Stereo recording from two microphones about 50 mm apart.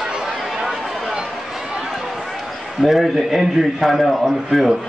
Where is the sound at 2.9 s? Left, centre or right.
Centre.